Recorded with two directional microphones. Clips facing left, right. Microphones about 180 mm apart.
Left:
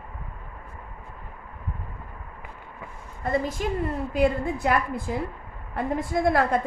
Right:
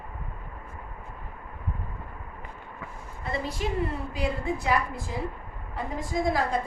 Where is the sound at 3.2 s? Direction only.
45° left (ahead or behind).